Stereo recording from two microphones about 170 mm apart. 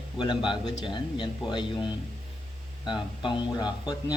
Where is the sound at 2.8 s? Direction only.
25° left (ahead or behind).